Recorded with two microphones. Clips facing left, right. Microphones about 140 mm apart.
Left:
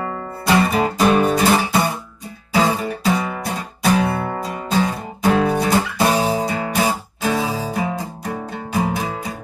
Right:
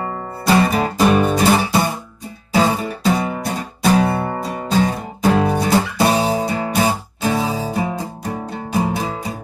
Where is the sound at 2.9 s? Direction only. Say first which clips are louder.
Right 1 dB; 30° right (ahead or behind).